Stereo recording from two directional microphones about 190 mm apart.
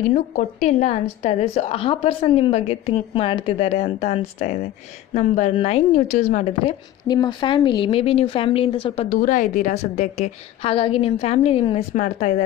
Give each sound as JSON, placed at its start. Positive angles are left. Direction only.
{"t": 0.1, "sound": "a woman's voice", "side_deg": 40}
{"t": 5.1, "sound": "a woman's voice", "side_deg": 40}
{"t": 9.2, "sound": "a woman's voice", "side_deg": 45}